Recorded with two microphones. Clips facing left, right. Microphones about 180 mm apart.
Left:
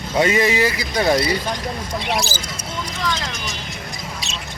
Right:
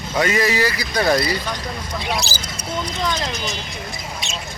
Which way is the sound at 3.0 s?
20° right (ahead or behind).